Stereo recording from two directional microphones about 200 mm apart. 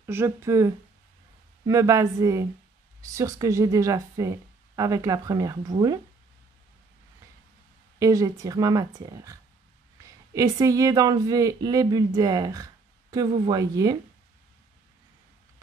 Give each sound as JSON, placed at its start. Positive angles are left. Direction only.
{"t": 0.0, "sound": "speech", "side_deg": -10}
{"t": 8.0, "sound": "speech", "side_deg": -15}